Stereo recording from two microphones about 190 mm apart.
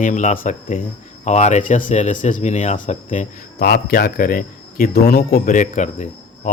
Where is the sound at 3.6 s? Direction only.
55° left (ahead or behind).